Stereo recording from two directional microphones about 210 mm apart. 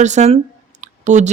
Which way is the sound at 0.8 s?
35° right (ahead or behind).